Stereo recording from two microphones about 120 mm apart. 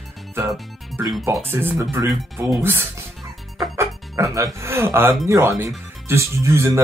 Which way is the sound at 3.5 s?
25° right (ahead or behind).